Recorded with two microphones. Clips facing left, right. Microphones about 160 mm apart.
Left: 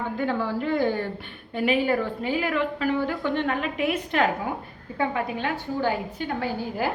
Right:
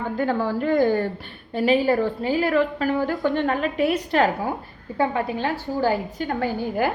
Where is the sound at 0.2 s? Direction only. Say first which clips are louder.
Right 4 dB; 40° right (ahead or behind).